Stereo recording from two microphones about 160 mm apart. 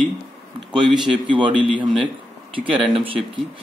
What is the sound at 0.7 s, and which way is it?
Speech, 30° right (ahead or behind).